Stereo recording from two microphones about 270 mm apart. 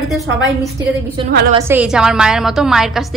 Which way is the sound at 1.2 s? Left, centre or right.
Centre.